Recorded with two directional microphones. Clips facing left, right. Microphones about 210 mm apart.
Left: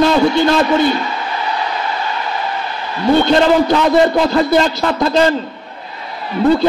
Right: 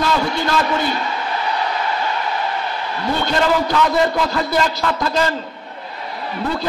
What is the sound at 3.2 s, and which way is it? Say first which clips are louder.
A man's voice: left 6 dB; 25° left (ahead or behind).